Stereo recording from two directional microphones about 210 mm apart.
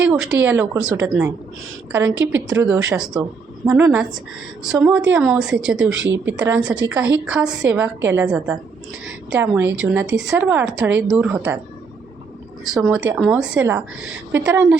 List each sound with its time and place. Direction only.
0.0 s a woman's voice: 5° right (ahead or behind)
2.0 s a woman's voice: 65° right (ahead or behind)
2.5 s a woman's voice: 10° right (ahead or behind)
12.7 s a woman's voice: 5° right (ahead or behind)